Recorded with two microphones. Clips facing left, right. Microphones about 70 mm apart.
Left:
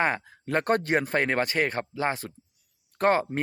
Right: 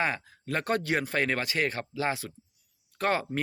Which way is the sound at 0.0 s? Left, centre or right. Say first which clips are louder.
Left 4 dB; left.